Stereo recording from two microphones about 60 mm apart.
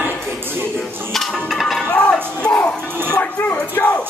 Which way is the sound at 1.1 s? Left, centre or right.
Centre.